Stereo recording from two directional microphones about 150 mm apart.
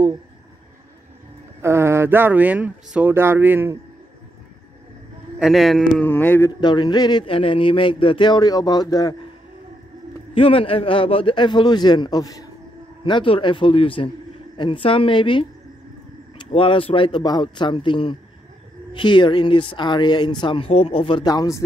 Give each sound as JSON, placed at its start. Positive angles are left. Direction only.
{"t": 1.6, "sound": "speech", "side_deg": -15}
{"t": 5.4, "sound": "speech", "side_deg": 0}
{"t": 6.0, "sound": "a sound", "side_deg": 10}
{"t": 6.6, "sound": "speech", "side_deg": 30}
{"t": 10.3, "sound": "speech", "side_deg": 40}
{"t": 16.5, "sound": "speech", "side_deg": 35}